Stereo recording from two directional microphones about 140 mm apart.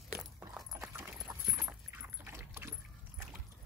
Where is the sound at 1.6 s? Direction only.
15° right (ahead or behind).